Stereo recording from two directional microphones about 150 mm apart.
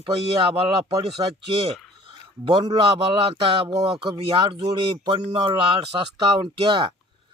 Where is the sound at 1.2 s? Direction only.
25° right (ahead or behind).